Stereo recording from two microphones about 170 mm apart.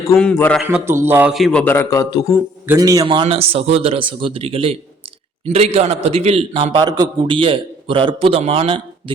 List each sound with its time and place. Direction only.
0.1 s a man's voice: 10° left (ahead or behind)
0.7 s a man's voice: 15° right (ahead or behind)
1.3 s a man's voice: centre (ahead or behind); by 2.2 s 20° left (ahead or behind)
2.7 s a man's voice: 20° right (ahead or behind)